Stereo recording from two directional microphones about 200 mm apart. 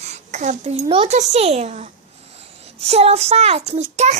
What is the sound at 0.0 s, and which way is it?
A child's voice, 35° right (ahead or behind).